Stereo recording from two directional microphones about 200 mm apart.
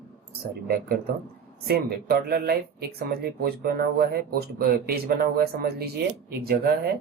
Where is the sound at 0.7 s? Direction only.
50° right (ahead or behind).